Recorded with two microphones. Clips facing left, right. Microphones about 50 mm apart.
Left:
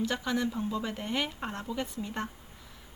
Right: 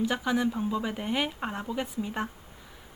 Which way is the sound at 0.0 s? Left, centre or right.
Centre.